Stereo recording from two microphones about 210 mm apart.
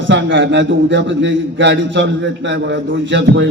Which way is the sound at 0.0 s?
60° right (ahead or behind).